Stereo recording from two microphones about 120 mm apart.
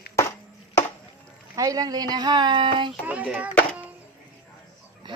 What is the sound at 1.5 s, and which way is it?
A woman's voice, 30° right (ahead or behind).